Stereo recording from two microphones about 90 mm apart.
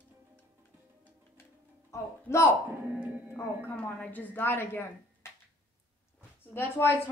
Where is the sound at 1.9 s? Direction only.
30° left (ahead or behind).